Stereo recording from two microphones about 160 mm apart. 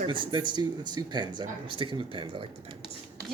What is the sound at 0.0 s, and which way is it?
Speech, 30° right (ahead or behind).